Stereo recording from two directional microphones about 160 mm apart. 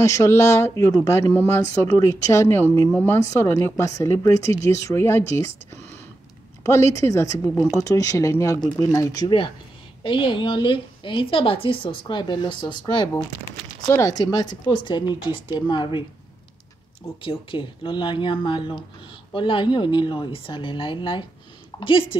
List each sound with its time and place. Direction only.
0.0 s a woman's voice: 20° left (ahead or behind)
6.6 s a woman's voice: 20° left (ahead or behind)
17.2 s a woman's voice: 35° left (ahead or behind)